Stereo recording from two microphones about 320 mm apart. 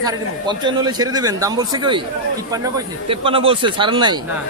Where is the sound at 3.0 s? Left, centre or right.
Centre.